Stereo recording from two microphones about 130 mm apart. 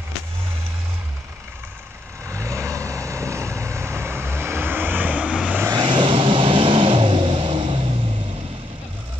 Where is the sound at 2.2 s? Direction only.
20° right (ahead or behind).